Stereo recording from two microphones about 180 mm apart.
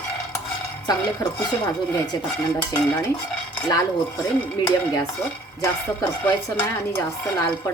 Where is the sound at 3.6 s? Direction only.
20° left (ahead or behind).